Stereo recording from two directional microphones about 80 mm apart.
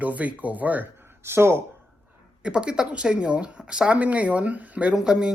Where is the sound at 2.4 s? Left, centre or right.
Centre.